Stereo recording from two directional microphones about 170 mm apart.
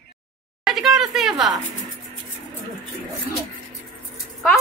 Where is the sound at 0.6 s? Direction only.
Centre (ahead or behind).